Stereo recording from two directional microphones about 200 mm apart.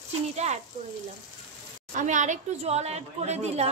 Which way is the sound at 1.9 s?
35° right (ahead or behind).